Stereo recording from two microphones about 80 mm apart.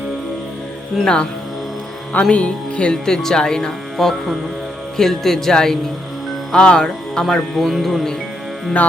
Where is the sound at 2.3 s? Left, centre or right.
Centre.